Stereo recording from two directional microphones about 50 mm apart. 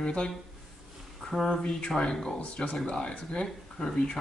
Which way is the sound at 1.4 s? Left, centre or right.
Centre.